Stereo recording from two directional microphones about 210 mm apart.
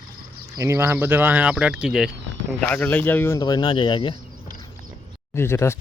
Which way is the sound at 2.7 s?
10° left (ahead or behind).